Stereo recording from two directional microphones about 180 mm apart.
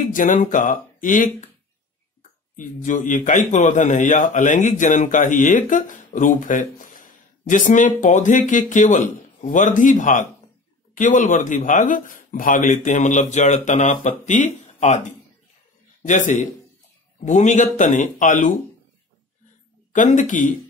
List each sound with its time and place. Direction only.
0.1 s a man's voice: 45° left (ahead or behind)
2.5 s a man's voice: 45° left (ahead or behind)
19.9 s a man's voice: 45° left (ahead or behind)